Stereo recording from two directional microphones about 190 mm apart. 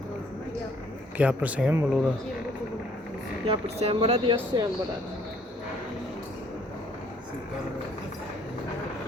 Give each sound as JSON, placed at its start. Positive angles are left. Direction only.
{"t": 1.2, "sound": "speech", "side_deg": -5}
{"t": 3.4, "sound": "speech", "side_deg": -30}